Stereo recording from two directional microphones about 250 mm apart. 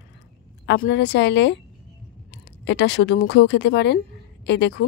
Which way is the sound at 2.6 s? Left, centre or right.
Left.